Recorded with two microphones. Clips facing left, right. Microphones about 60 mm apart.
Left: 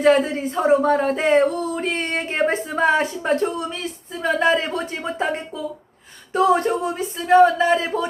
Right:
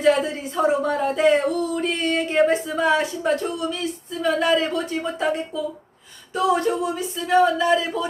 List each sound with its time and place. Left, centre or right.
0.0 s speech: left